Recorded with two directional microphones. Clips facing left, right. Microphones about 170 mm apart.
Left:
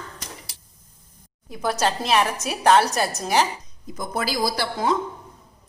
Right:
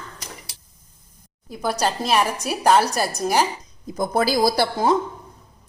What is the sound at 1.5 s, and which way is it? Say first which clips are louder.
A woman's voice: even; centre (ahead or behind).